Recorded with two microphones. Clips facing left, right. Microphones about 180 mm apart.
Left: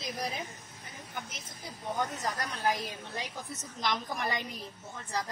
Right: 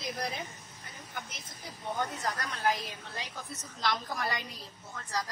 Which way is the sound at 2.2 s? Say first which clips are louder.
Even; 15° left (ahead or behind).